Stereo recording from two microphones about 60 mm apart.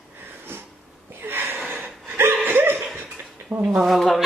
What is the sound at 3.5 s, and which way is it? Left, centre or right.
Speech, centre.